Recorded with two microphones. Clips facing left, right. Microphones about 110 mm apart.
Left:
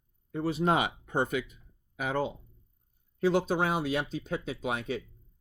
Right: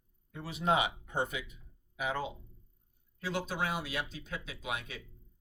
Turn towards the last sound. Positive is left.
turn(degrees=40)  # may be behind; listen again after turning